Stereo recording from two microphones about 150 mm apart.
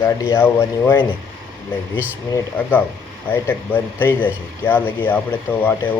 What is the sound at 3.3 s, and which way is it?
Speech, 15° left (ahead or behind).